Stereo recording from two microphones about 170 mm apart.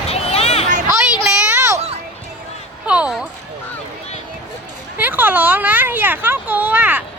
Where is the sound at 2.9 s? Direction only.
5° right (ahead or behind).